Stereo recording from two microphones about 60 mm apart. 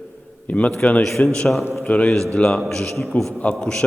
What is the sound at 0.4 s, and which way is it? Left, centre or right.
A man's voice, left.